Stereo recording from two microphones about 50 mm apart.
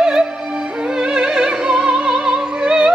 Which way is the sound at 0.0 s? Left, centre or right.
Centre.